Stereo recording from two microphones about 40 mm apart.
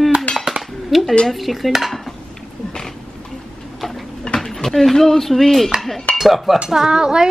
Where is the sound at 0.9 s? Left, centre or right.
Centre.